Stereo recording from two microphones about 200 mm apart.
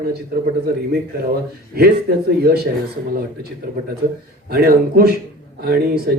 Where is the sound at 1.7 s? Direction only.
50° right (ahead or behind).